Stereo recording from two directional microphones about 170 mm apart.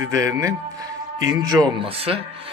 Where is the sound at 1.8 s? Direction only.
35° right (ahead or behind).